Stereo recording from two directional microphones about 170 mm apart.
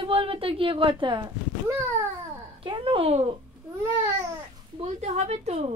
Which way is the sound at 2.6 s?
30° right (ahead or behind).